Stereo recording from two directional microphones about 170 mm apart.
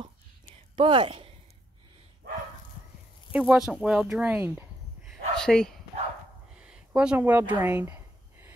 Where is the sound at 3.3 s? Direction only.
5° right (ahead or behind).